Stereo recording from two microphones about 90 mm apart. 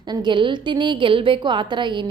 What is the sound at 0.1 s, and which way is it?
A woman's voice, 65° right (ahead or behind).